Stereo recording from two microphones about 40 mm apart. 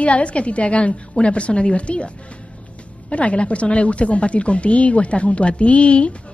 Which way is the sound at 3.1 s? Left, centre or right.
Left.